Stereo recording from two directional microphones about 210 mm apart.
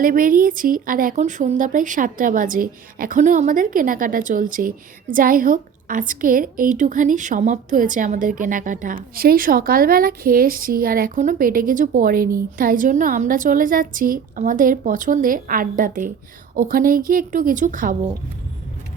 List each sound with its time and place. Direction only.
0.0 s a woman's voice: 40° right (ahead or behind)